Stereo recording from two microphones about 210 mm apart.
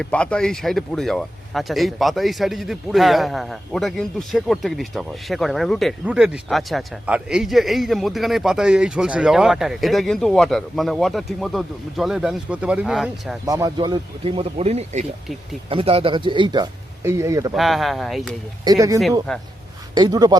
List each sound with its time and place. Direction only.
0.0 s speech: 5° left (ahead or behind)
13.4 s speech: 15° right (ahead or behind)
17.5 s speech: centre (ahead or behind)
18.6 s speech: 15° right (ahead or behind)
19.3 s speech: 5° left (ahead or behind)
19.9 s speech: 20° right (ahead or behind)